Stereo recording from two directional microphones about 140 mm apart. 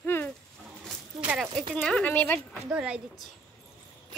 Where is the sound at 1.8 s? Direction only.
5° left (ahead or behind).